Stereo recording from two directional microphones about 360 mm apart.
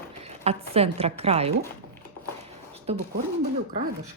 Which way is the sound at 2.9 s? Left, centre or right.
Centre.